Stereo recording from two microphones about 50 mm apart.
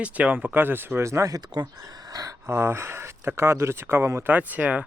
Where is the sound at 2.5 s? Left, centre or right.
Right.